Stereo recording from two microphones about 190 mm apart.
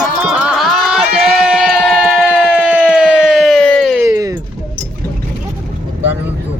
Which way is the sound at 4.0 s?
20° right (ahead or behind).